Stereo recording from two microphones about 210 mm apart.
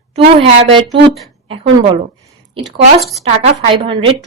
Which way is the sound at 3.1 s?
30° right (ahead or behind).